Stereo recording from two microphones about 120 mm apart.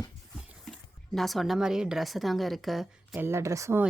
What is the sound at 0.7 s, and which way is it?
Speech, centre (ahead or behind).